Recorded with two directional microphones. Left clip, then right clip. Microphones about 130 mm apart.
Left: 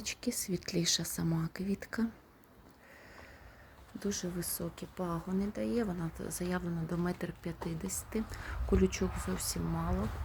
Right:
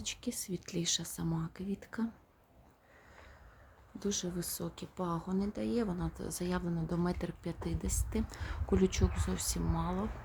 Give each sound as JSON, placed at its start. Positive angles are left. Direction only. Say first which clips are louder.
{"t": 0.0, "sound": "speech", "louder": "left 3 dB", "side_deg": 10}
{"t": 4.0, "sound": "speech", "louder": "right 1 dB", "side_deg": -10}